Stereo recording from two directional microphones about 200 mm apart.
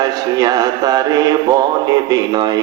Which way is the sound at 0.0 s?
20° right (ahead or behind).